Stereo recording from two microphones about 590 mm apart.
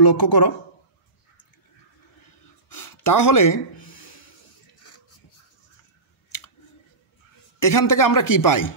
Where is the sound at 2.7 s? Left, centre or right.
Left.